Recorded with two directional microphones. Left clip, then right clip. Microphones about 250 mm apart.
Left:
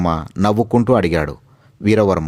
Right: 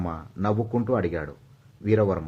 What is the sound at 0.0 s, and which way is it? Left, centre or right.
Speech, left.